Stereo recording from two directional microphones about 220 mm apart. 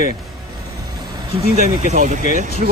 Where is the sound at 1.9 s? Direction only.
35° right (ahead or behind).